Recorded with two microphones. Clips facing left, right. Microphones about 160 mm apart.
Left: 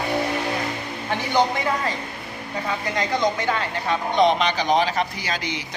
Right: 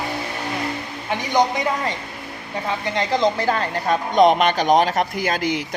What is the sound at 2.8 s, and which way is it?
Speech, 25° right (ahead or behind).